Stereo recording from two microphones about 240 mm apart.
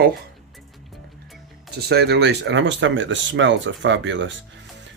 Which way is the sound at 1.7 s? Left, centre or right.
Right.